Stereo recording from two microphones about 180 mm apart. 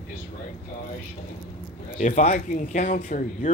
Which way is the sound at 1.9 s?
40° left (ahead or behind).